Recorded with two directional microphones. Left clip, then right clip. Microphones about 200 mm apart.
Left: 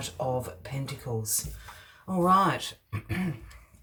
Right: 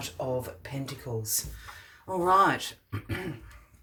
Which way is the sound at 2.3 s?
35° right (ahead or behind).